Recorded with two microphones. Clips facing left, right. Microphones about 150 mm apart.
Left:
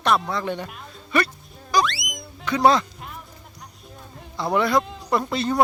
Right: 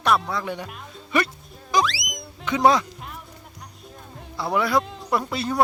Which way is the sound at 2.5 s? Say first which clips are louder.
Even; 20° right (ahead or behind).